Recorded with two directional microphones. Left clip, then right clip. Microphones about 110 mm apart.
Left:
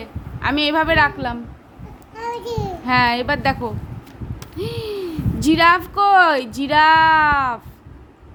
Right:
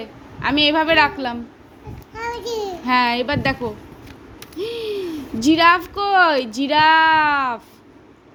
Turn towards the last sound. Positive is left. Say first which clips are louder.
# left 1 dB
turn(degrees=-10)  # may be behind; listen again after turning